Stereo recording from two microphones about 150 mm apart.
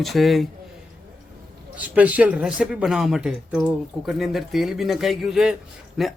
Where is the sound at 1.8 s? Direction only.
10° right (ahead or behind).